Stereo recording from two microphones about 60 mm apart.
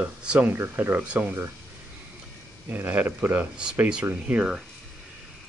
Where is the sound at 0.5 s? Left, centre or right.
Right.